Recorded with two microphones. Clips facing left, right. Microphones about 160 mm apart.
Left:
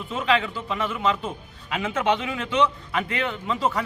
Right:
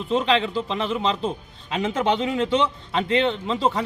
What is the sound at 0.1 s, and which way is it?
Speech, 30° right (ahead or behind).